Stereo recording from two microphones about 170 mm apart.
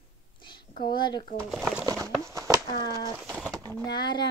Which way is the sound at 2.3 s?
15° right (ahead or behind).